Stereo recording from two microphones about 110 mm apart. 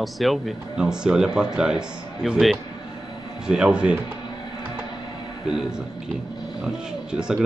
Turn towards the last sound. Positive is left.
turn(degrees=-5)  # may be behind; listen again after turning